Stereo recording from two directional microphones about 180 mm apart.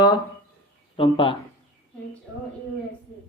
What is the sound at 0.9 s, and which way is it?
Speech, 30° left (ahead or behind).